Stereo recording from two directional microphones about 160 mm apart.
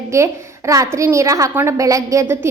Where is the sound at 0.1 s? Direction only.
15° right (ahead or behind).